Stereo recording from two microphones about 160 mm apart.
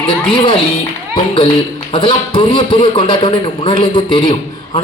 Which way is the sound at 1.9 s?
30° left (ahead or behind).